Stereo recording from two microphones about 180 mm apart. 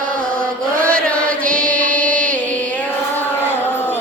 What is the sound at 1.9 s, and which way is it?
Music, 5° left (ahead or behind).